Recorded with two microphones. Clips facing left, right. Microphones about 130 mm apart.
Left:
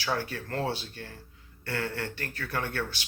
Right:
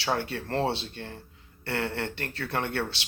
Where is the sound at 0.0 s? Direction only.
25° right (ahead or behind).